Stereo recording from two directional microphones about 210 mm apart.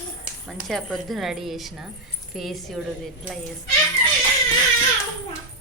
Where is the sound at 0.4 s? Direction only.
Centre (ahead or behind).